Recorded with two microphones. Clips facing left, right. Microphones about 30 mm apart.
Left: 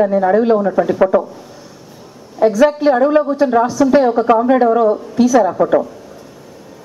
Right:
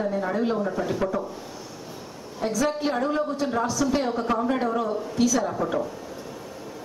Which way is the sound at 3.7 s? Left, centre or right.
Centre.